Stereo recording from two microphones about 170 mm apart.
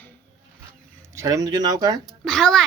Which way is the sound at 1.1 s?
20° right (ahead or behind).